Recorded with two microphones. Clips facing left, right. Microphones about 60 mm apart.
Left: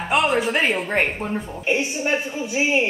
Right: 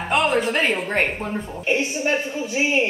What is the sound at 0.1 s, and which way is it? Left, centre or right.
A man's voice, centre.